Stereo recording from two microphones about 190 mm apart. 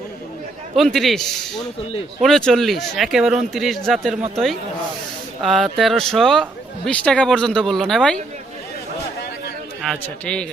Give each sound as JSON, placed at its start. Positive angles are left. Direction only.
{"t": 0.8, "sound": "speech", "side_deg": 0}
{"t": 5.4, "sound": "speech", "side_deg": 0}
{"t": 9.8, "sound": "speech", "side_deg": 5}